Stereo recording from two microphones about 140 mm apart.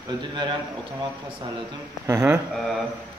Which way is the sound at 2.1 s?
20° right (ahead or behind).